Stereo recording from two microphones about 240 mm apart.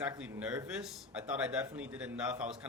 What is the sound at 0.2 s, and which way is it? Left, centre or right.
Speech, centre.